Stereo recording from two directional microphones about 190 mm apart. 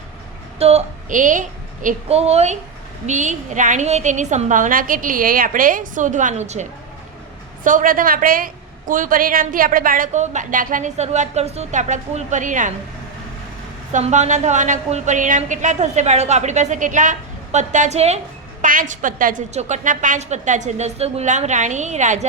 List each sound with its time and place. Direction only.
0.6 s a woman's voice: 35° right (ahead or behind)
13.9 s a woman's voice: 40° right (ahead or behind)